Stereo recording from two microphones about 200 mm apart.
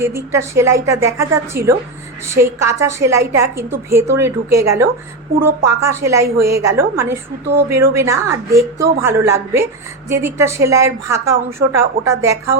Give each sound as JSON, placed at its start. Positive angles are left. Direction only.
{"t": 0.0, "sound": "a woman's voice", "side_deg": -15}
{"t": 12.0, "sound": "a woman's voice", "side_deg": -50}